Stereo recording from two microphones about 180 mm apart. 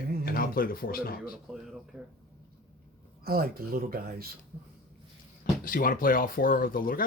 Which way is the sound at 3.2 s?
55° right (ahead or behind).